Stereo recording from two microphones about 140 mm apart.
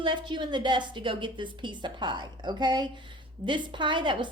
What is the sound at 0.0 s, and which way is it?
A woman's voice, 35° right (ahead or behind).